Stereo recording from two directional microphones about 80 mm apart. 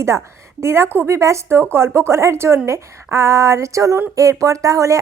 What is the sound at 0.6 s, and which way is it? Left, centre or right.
Speech, right.